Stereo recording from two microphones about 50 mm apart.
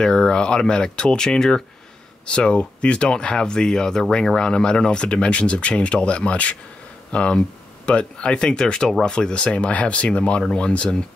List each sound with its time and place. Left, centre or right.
0.0 s speech: centre